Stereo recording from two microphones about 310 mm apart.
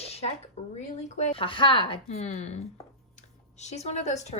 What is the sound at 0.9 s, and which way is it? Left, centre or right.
Speech, left.